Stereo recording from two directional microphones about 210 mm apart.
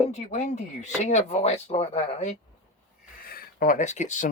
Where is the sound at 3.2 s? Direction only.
45° left (ahead or behind).